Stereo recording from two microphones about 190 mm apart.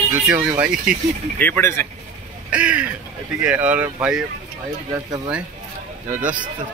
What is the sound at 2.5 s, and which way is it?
Speech, 5° right (ahead or behind).